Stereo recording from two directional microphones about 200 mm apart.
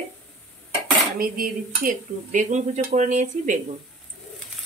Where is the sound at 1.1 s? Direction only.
45° right (ahead or behind).